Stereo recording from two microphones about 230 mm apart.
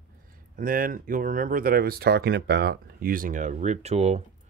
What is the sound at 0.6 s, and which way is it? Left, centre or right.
Speech, right.